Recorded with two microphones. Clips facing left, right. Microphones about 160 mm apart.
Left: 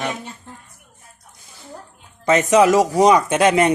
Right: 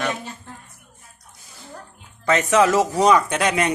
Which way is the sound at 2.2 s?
20° left (ahead or behind).